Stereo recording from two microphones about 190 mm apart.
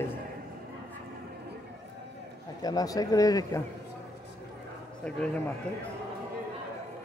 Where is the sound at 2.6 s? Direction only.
20° left (ahead or behind).